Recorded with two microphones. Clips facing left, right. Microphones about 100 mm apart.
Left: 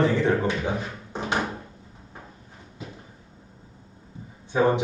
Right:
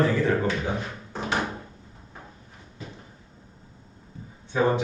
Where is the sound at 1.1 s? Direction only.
20° left (ahead or behind).